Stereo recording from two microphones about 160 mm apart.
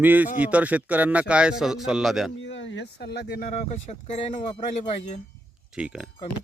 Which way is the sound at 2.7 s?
90° left.